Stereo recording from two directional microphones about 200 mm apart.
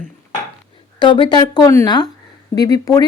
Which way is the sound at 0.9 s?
25° left (ahead or behind).